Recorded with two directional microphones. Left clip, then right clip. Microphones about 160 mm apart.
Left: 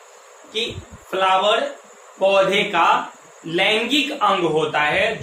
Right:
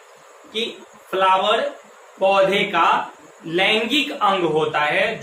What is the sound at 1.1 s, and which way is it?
A man's voice, 10° left (ahead or behind).